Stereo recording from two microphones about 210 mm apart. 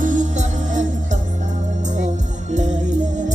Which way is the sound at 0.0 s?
35° right (ahead or behind).